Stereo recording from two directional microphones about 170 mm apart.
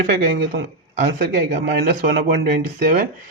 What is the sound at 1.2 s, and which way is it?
Speech, 75° right (ahead or behind).